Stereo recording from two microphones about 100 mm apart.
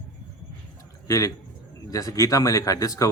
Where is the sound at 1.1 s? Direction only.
35° left (ahead or behind).